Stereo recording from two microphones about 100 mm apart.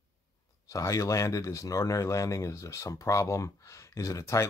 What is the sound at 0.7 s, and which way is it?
Speech, 30° left (ahead or behind).